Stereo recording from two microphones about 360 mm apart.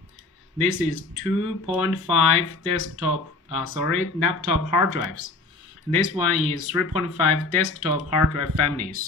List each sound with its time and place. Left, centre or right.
0.6 s speech: left